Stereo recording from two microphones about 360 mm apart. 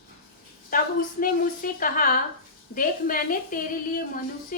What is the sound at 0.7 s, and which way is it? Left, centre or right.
A woman's voice, left.